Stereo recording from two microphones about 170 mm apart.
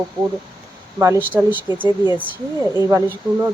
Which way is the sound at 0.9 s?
15° right (ahead or behind).